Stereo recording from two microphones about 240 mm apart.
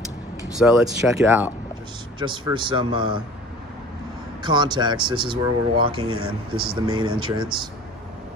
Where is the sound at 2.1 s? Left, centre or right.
Centre.